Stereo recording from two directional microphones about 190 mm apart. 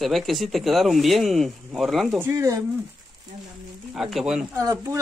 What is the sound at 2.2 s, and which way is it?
Speech, 15° right (ahead or behind).